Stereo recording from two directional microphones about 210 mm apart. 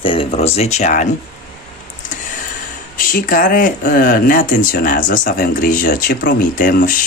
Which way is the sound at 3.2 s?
40° left (ahead or behind).